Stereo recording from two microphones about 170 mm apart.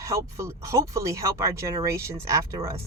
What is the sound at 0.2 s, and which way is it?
Speech, 15° right (ahead or behind).